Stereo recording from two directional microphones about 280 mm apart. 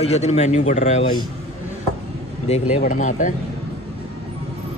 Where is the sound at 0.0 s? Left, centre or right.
Left.